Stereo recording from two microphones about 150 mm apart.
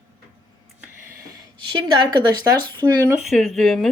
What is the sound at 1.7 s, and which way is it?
Speech, 30° right (ahead or behind).